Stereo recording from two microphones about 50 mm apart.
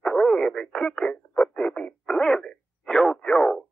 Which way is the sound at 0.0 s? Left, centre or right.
Centre.